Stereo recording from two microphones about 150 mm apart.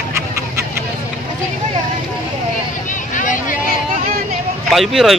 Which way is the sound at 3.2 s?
60° left (ahead or behind).